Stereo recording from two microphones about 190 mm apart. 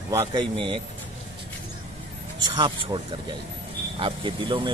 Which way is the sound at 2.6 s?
25° right (ahead or behind).